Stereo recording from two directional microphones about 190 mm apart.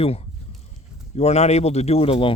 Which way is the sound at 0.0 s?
30° left (ahead or behind).